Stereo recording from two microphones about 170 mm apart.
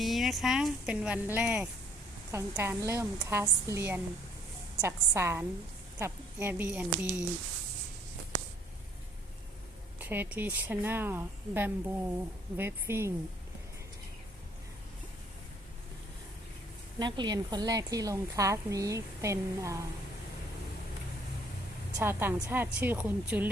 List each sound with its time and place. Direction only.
0.0 s speech: centre (ahead or behind)
10.0 s speech: 10° right (ahead or behind)
17.0 s speech: 25° right (ahead or behind)
21.9 s speech: 15° right (ahead or behind)